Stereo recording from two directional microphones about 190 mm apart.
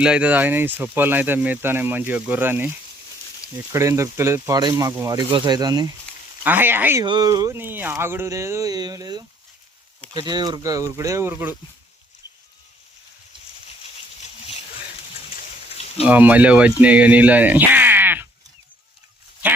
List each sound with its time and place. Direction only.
0.0 s speech: 5° right (ahead or behind)
6.4 s speech: 10° right (ahead or behind)
7.0 s speech: 20° right (ahead or behind)
14.2 s a sound: 35° left (ahead or behind)
16.0 s speech: 10° right (ahead or behind)